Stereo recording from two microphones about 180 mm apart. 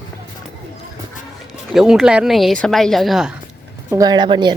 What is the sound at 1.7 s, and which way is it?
Speech, centre (ahead or behind).